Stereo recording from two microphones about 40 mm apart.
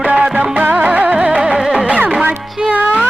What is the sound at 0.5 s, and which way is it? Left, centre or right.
Music, right.